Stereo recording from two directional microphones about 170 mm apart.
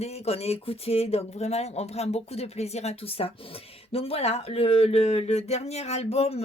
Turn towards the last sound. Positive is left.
turn(degrees=35)  # may be behind; listen again after turning